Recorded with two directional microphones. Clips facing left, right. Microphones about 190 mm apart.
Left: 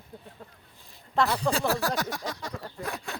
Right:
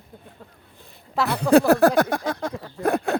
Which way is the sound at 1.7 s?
55° right (ahead or behind).